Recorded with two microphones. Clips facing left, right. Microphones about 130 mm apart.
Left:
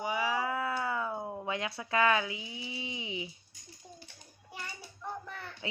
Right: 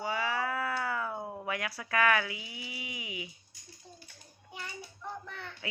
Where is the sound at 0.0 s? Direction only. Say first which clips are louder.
Left 1 dB; 15° left (ahead or behind).